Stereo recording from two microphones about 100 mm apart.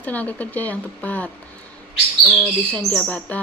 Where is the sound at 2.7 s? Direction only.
10° left (ahead or behind).